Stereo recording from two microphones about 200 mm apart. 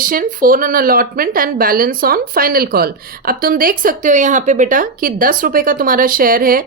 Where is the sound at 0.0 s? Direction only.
45° right (ahead or behind).